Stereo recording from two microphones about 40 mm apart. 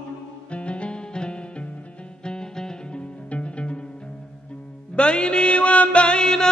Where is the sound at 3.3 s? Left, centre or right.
Left.